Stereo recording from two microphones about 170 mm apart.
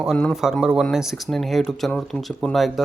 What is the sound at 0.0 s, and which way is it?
Speech, 5° left (ahead or behind).